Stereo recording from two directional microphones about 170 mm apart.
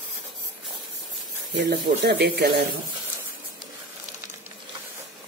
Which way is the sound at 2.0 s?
75° right (ahead or behind).